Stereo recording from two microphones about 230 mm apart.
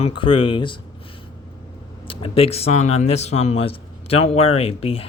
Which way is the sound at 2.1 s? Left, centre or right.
Left.